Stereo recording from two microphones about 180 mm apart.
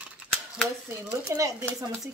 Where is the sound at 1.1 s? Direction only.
20° right (ahead or behind).